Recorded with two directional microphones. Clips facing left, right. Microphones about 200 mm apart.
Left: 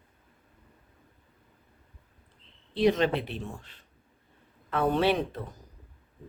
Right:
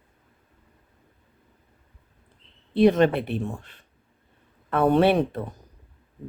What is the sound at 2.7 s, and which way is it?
Speech, 55° right (ahead or behind).